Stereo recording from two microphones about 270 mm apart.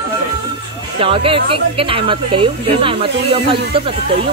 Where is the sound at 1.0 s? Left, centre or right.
Centre.